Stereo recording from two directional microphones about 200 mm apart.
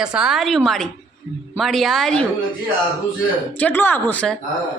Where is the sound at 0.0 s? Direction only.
5° right (ahead or behind).